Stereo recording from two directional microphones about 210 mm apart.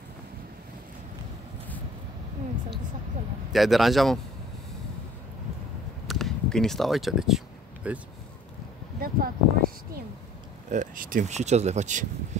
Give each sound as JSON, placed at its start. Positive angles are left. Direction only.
{"t": 3.5, "sound": "speech", "side_deg": 0}
{"t": 6.0, "sound": "a sound", "side_deg": 0}
{"t": 9.0, "sound": "speech", "side_deg": -45}
{"t": 10.7, "sound": "speech", "side_deg": -40}